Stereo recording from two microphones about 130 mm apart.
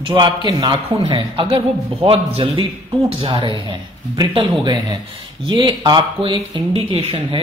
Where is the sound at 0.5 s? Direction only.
35° right (ahead or behind).